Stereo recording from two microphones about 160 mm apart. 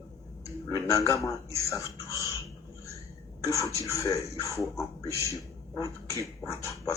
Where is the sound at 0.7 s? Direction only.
20° left (ahead or behind).